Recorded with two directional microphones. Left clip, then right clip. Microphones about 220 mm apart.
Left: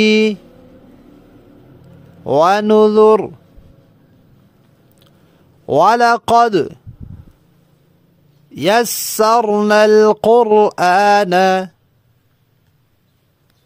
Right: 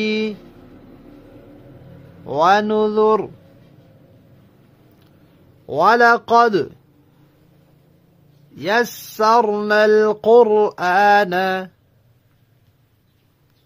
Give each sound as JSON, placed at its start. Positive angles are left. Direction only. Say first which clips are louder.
{"t": 0.0, "sound": "speech", "louder": "left 9 dB", "side_deg": 40}
{"t": 2.2, "sound": "speech", "louder": "left 3 dB", "side_deg": 40}
{"t": 5.7, "sound": "speech", "louder": "left 2 dB", "side_deg": 45}
{"t": 8.5, "sound": "speech", "louder": "left 5 dB", "side_deg": 45}